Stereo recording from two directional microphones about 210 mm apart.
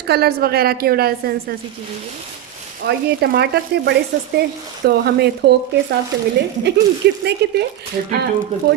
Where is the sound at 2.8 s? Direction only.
50° right (ahead or behind).